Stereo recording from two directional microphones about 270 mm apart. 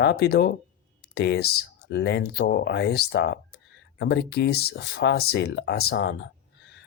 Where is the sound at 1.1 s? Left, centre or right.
Left.